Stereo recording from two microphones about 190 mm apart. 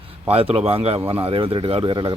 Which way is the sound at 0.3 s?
30° right (ahead or behind).